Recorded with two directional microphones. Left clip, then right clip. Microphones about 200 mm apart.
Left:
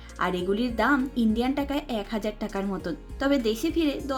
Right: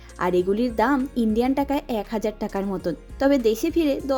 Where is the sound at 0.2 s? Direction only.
45° right (ahead or behind).